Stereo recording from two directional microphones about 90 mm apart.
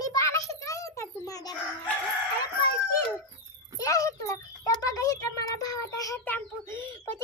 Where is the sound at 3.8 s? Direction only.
40° left (ahead or behind).